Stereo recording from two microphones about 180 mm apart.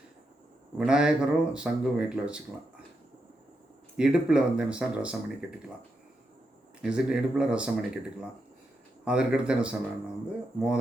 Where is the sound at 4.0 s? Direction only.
5° right (ahead or behind).